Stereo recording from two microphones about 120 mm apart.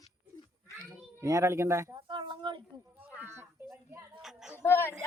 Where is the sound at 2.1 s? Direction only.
40° right (ahead or behind).